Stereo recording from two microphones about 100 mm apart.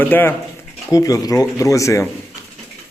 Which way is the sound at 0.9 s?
35° left (ahead or behind).